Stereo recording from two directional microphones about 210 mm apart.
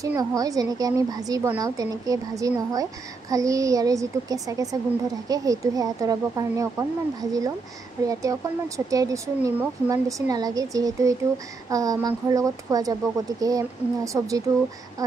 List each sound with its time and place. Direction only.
0.0 s a woman's voice: 15° right (ahead or behind)